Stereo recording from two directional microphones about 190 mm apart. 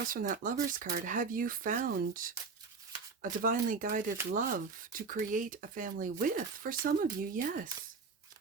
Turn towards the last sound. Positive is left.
turn(degrees=-50)  # may be behind; listen again after turning